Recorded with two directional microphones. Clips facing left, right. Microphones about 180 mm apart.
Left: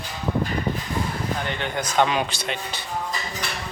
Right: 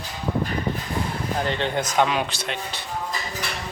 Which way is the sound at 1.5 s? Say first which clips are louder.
Right 3 dB; 30° right (ahead or behind).